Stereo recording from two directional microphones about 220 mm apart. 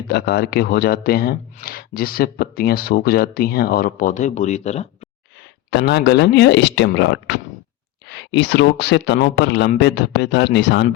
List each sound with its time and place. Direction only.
0.1 s speech: 50° left (ahead or behind); by 5.0 s 30° left (ahead or behind)
5.7 s speech: 50° left (ahead or behind)